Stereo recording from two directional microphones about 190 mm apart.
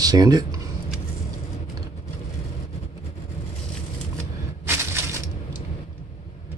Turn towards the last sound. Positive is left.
turn(degrees=-15)  # may be behind; listen again after turning